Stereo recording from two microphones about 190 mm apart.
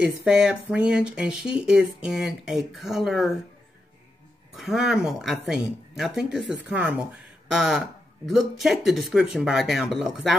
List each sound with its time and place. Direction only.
0.0 s speech: 5° right (ahead or behind)
4.6 s speech: centre (ahead or behind)